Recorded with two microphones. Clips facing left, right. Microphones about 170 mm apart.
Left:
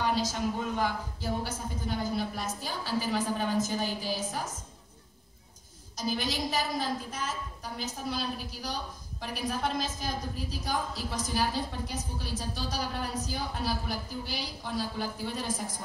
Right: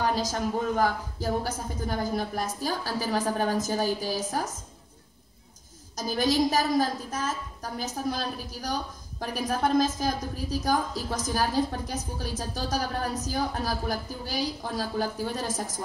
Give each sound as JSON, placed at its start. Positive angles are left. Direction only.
{"t": 0.0, "sound": "speech", "side_deg": -40}
{"t": 5.9, "sound": "a woman's voice", "side_deg": -40}